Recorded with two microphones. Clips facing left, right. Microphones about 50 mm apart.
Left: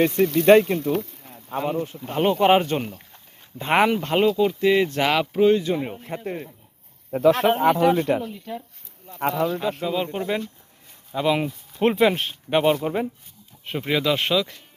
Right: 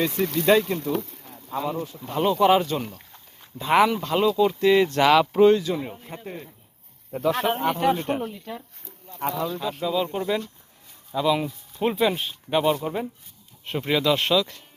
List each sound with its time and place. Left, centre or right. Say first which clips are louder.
0.3 s speech: left 5 dB; left
0.9 s speech: left 3 dB; left
4.3 s speech: right 3 dB; left
5.8 s speech: left 5 dB; left
7.6 s speech: left 4 dB; left
9.1 s speech: left 4 dB; left
9.8 s speech: even; left
11.1 s speech: left 1 dB; left
11.7 s speech: left 4 dB; left
13.7 s speech: even; centre